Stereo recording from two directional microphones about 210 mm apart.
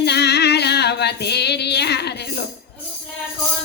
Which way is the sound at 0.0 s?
50° left (ahead or behind).